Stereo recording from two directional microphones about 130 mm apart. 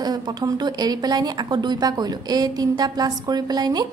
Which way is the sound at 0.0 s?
30° right (ahead or behind).